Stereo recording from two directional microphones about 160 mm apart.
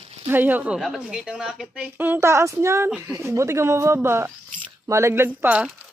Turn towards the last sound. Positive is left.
turn(degrees=-10)  # may be behind; listen again after turning